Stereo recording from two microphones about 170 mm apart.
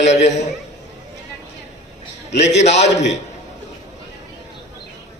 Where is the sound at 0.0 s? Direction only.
40° left (ahead or behind).